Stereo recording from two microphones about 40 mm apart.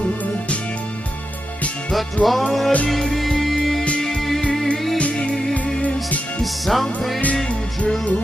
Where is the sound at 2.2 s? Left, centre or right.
Left.